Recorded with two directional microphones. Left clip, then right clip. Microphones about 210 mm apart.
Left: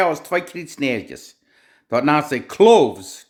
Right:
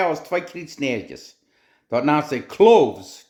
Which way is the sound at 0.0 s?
20° left (ahead or behind).